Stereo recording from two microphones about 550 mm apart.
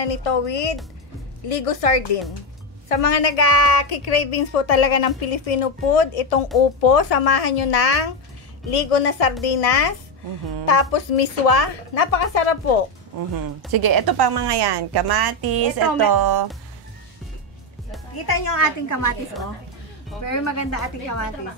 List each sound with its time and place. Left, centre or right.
0.0 s a woman's voice: left
1.5 s a woman's voice: left
13.7 s a woman's voice: right
18.1 s a woman's voice: left
20.2 s a woman's voice: left